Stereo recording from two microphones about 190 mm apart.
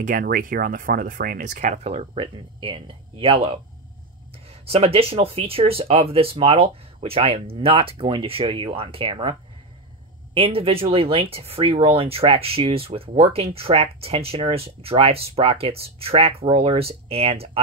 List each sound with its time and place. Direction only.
0.0 s speech: 45° right (ahead or behind); by 17.5 s 30° right (ahead or behind)